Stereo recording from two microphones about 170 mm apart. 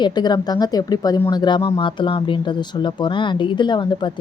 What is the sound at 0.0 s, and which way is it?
Speech, 25° left (ahead or behind).